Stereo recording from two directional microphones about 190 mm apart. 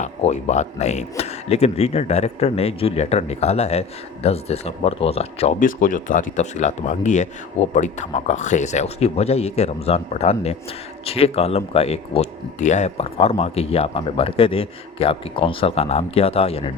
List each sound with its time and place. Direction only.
0.0 s speech: 35° left (ahead or behind)